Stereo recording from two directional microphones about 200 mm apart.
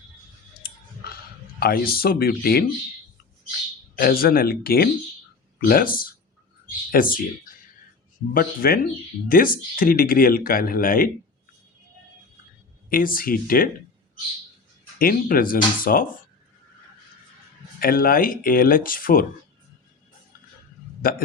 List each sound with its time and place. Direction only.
1.5 s speech: 50° left (ahead or behind)
3.9 s speech: 50° left (ahead or behind)
8.3 s speech: 45° left (ahead or behind)
12.9 s speech: 45° left (ahead or behind)
14.9 s speech: 45° left (ahead or behind)
17.7 s speech: 45° left (ahead or behind)
21.0 s speech: 45° left (ahead or behind)